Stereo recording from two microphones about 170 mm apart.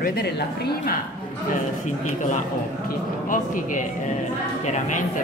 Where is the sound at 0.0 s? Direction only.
65° left (ahead or behind).